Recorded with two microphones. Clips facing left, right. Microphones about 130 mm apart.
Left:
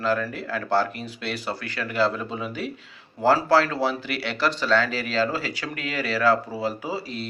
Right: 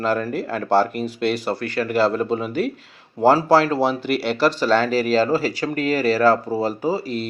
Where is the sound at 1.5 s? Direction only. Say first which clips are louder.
Right 8 dB; 50° right (ahead or behind).